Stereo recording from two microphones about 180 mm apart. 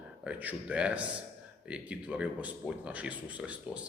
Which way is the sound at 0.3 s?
10° right (ahead or behind).